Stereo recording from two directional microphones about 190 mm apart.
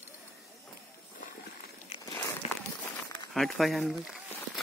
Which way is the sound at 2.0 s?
15° left (ahead or behind).